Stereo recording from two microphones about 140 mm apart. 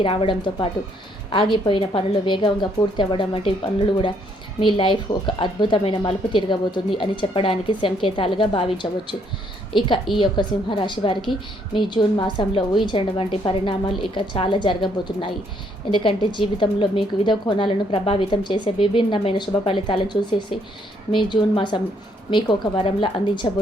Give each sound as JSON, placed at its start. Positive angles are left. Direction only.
{"t": 0.0, "sound": "a woman's voice", "side_deg": 40}
{"t": 10.2, "sound": "a woman's voice", "side_deg": 35}